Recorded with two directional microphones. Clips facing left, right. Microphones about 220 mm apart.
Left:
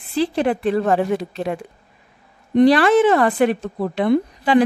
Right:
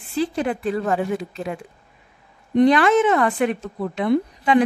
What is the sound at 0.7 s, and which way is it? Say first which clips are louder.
Speech: left 4 dB; 35° left (ahead or behind).